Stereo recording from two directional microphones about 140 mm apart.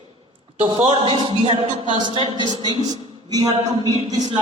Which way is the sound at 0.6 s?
40° right (ahead or behind).